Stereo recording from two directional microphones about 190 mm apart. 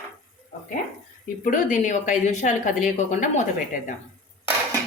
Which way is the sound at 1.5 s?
45° left (ahead or behind).